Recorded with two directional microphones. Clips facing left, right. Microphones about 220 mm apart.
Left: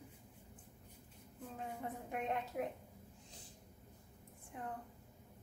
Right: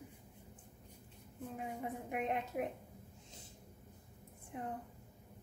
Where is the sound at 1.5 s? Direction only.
15° right (ahead or behind).